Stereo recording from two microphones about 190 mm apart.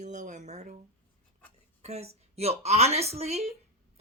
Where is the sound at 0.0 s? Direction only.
40° right (ahead or behind).